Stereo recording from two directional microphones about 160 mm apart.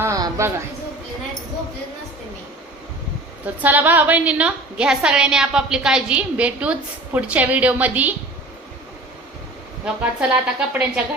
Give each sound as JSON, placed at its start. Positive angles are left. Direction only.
{"t": 0.0, "sound": "a sound", "side_deg": -20}
{"t": 3.4, "sound": "a woman's voice", "side_deg": -10}
{"t": 9.8, "sound": "a woman's voice", "side_deg": -10}